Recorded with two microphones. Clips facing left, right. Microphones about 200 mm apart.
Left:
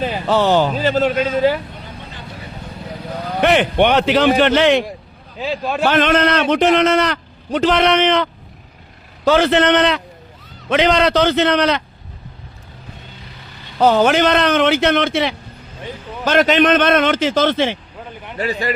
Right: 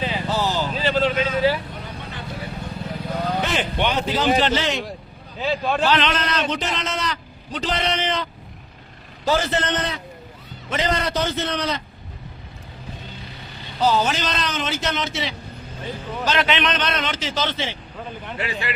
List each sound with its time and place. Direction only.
0.3 s a man's voice: 65° left (ahead or behind); by 1.6 s 50° left (ahead or behind)
3.4 s a man's voice: 65° left (ahead or behind)
5.4 s a man's voice: 5° left (ahead or behind)
5.9 s a man's voice: 50° left (ahead or behind); by 11.8 s 75° left (ahead or behind)
13.7 s a man's voice: 60° left (ahead or behind)
16.2 s a man's voice: 50° left (ahead or behind)
18.3 s speech: 40° left (ahead or behind)